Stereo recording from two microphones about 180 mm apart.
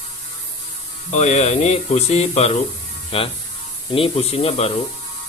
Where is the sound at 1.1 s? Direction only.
40° left (ahead or behind).